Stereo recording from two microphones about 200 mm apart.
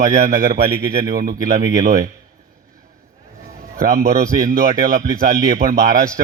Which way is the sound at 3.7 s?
50° right (ahead or behind).